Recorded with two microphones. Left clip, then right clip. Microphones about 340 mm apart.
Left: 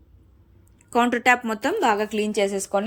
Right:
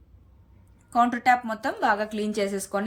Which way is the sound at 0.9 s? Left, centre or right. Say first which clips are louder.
Left 2 dB; centre.